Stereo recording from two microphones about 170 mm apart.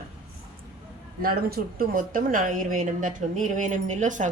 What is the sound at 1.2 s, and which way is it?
A woman's voice, 60° right (ahead or behind).